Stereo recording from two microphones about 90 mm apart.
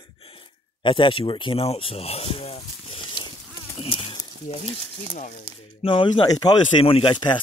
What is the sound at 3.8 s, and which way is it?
Speech, 75° left (ahead or behind).